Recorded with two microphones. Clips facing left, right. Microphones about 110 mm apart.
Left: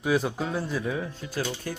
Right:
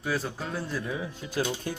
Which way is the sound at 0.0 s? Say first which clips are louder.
Left 6 dB; 15° left (ahead or behind).